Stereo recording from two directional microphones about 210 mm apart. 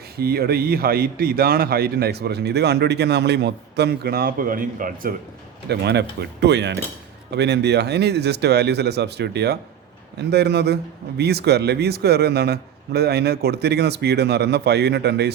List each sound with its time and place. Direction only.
0.2 s speech: 50° right (ahead or behind)
5.6 s speech: 50° right (ahead or behind)